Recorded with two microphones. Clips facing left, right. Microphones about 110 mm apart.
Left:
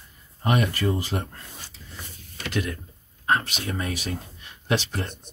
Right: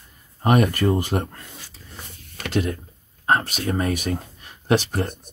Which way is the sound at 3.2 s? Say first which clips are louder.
Right 3 dB; 35° right (ahead or behind).